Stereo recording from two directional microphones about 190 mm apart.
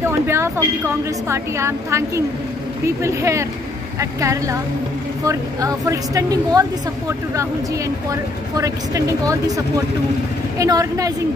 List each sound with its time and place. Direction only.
0.0 s a woman's voice: 15° right (ahead or behind)
8.1 s speech: 15° right (ahead or behind)
10.6 s speech: 15° right (ahead or behind)